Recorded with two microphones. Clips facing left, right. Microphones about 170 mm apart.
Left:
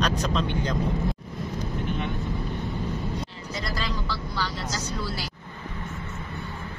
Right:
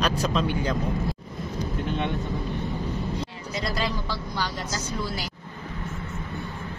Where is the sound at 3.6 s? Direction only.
15° right (ahead or behind).